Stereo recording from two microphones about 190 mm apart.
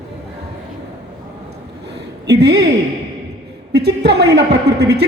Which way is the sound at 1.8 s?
60° right (ahead or behind).